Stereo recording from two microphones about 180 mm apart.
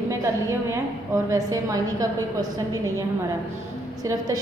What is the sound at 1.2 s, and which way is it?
A woman's voice, 20° right (ahead or behind).